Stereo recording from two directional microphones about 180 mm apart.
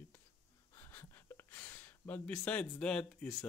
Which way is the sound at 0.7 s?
15° left (ahead or behind).